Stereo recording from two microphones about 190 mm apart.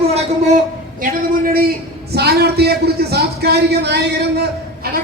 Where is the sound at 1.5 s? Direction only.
50° right (ahead or behind).